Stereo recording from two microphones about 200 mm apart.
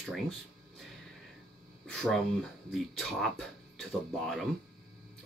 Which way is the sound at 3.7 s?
Centre (ahead or behind).